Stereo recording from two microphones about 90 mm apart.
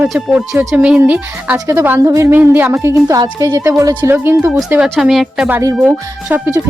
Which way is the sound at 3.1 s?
40° right (ahead or behind).